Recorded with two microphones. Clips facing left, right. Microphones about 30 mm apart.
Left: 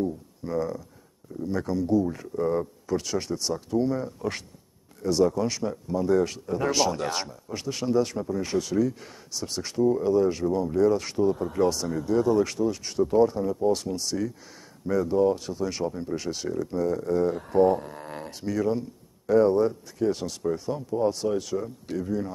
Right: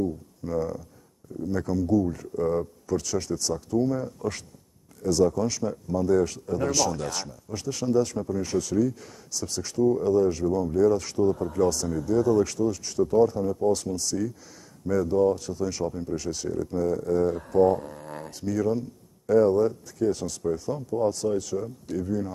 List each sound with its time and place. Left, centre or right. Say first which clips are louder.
0.4 s speech: even; left
2.3 s speech: even; centre
2.9 s speech: right 1 dB; left